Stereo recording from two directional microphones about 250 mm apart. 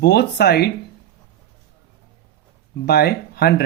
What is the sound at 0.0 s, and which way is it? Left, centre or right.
Speech, left.